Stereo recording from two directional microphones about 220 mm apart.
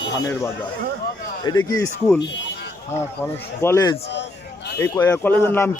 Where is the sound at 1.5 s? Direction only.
15° left (ahead or behind).